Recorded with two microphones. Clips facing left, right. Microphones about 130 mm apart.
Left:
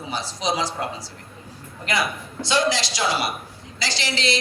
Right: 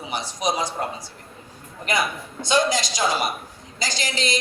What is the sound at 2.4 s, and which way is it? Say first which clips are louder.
Speech: right 1 dB; 45° right (ahead or behind).